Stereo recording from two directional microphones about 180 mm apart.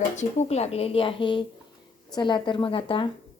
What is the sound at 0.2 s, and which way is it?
A woman's voice, 40° left (ahead or behind).